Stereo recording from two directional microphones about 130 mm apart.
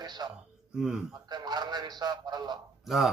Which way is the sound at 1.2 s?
35° right (ahead or behind).